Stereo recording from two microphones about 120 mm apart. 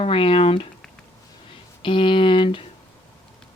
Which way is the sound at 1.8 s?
45° left (ahead or behind).